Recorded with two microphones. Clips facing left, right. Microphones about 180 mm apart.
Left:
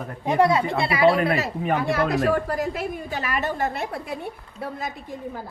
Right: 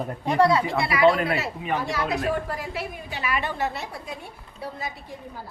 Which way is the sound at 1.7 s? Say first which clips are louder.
Left 4 dB; 55° left (ahead or behind).